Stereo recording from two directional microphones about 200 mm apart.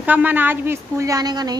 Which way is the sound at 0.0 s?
10° right (ahead or behind).